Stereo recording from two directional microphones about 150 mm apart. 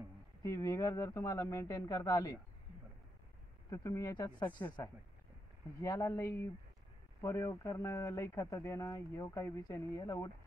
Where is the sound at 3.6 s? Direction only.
20° left (ahead or behind).